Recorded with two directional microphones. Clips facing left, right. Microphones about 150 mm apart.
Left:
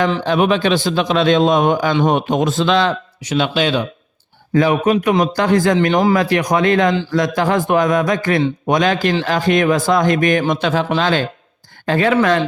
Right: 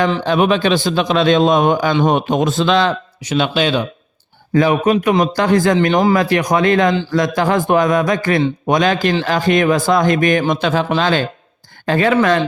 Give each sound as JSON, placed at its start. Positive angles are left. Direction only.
{"t": 0.0, "sound": "a man's voice", "side_deg": -35}